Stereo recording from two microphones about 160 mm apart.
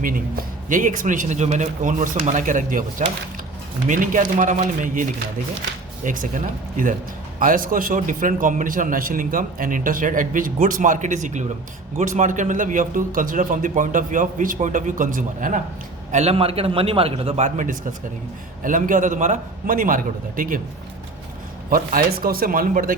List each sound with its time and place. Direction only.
0.7 s a man's voice: 55° right (ahead or behind)
3.8 s a man's voice: 55° right (ahead or behind)
6.1 s a man's voice: 55° right (ahead or behind)
16.1 s a man's voice: 40° right (ahead or behind); by 20.6 s 60° right (ahead or behind)
21.7 s a man's voice: 65° right (ahead or behind)